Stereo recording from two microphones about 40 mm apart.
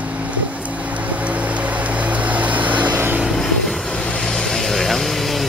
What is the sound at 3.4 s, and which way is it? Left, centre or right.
Vehicle, centre.